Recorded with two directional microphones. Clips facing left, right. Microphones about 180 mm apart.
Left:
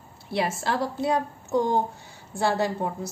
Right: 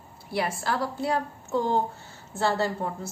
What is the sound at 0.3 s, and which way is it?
A woman's voice, 20° left (ahead or behind).